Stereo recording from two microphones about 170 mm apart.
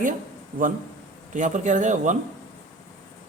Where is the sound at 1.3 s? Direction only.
45° right (ahead or behind).